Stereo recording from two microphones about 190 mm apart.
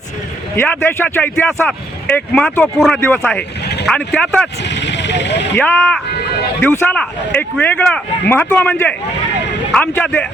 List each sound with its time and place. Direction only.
0.5 s speech: 10° left (ahead or behind)
3.6 s vehicle: 60° left (ahead or behind)
3.8 s speech: 5° left (ahead or behind)
4.6 s speech: 65° left (ahead or behind)
5.5 s speech: 10° left (ahead or behind)